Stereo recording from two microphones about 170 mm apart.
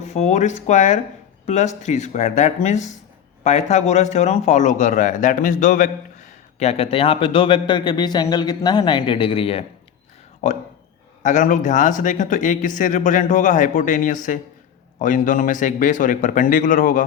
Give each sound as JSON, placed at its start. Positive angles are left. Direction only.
{"t": 0.0, "sound": "speech", "side_deg": 40}
{"t": 10.4, "sound": "speech", "side_deg": 45}